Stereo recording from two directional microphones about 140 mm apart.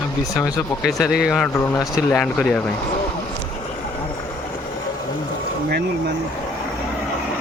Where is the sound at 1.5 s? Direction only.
25° left (ahead or behind).